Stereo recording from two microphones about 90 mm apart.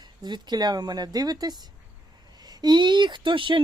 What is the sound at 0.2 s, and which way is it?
Speech, 55° right (ahead or behind).